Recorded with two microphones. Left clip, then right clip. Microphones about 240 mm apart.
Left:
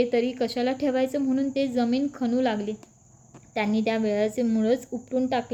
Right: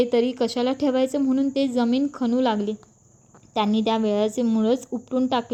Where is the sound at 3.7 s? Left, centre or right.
Right.